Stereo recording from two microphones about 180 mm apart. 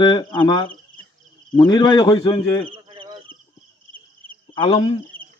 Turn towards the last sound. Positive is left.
turn(degrees=30)  # may be behind; listen again after turning